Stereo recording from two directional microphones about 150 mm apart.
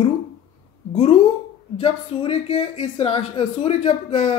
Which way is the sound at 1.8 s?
40° left (ahead or behind).